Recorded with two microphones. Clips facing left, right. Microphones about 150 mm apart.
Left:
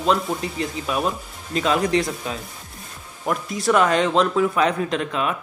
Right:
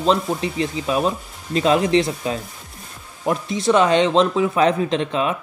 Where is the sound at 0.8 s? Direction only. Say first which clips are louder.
Right 3 dB; 30° right (ahead or behind).